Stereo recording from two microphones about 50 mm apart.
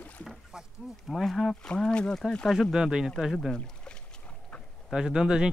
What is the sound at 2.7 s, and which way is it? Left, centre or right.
Speech, centre.